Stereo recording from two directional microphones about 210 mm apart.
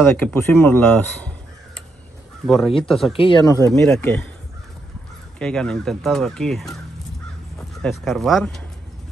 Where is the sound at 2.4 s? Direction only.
Centre (ahead or behind).